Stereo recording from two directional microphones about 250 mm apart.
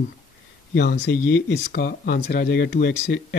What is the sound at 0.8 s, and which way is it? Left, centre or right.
Speech, left.